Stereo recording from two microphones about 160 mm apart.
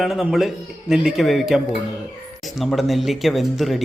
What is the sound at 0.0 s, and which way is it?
Speech, centre (ahead or behind).